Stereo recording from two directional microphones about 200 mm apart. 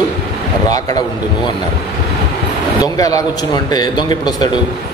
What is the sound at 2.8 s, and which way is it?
A man's voice, 15° left (ahead or behind).